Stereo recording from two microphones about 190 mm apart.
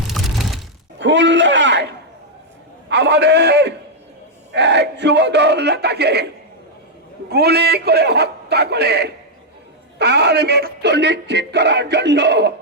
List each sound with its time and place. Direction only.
0.9 s a man's voice: 75° right (ahead or behind)
2.9 s a man's voice: 65° right (ahead or behind)